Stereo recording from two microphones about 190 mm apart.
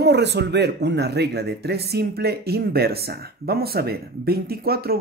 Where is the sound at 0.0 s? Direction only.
60° right (ahead or behind).